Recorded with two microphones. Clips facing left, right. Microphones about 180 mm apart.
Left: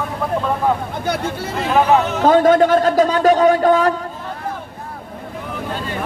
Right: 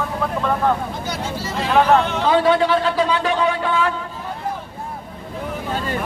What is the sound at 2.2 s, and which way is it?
A man's voice, 45° left (ahead or behind).